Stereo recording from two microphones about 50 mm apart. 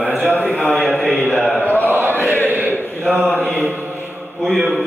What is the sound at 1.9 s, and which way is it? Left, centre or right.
Chant, right.